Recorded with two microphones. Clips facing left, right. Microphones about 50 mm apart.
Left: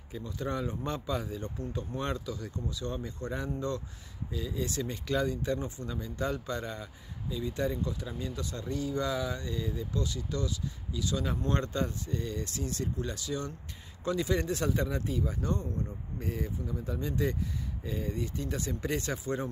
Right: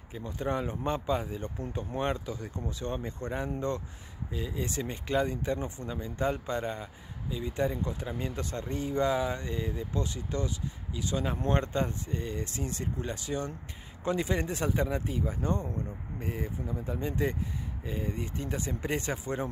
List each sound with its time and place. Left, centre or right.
0.1 s speech: right
2.6 s speech: right